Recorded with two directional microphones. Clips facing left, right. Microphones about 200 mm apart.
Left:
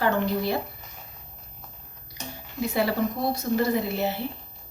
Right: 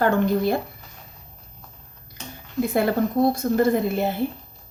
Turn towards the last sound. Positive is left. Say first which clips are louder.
# right 4 dB
turn(degrees=-50)  # may be behind; listen again after turning